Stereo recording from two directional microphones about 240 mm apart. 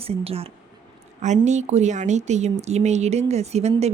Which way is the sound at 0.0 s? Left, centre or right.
Right.